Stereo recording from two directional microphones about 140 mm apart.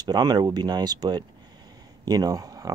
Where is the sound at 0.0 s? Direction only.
30° right (ahead or behind).